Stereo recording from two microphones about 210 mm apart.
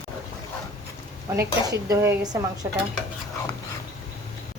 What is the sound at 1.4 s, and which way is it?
Speech, 15° right (ahead or behind).